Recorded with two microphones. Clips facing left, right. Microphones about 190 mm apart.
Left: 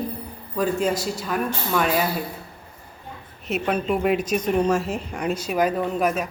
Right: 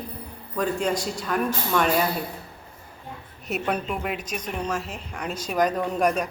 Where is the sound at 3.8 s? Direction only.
40° left (ahead or behind).